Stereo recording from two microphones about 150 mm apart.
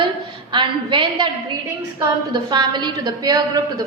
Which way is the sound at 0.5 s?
30° right (ahead or behind).